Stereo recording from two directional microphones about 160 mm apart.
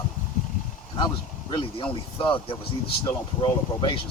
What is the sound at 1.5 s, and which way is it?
Speech, 35° left (ahead or behind).